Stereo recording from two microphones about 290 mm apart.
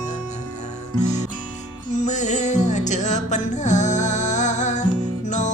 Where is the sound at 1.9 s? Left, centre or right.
Left.